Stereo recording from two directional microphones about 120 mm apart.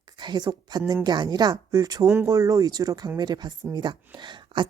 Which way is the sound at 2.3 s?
30° right (ahead or behind).